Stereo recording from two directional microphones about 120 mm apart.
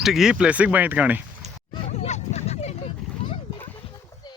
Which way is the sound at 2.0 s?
70° left (ahead or behind).